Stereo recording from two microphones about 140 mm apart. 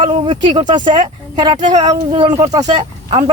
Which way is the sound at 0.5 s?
30° right (ahead or behind).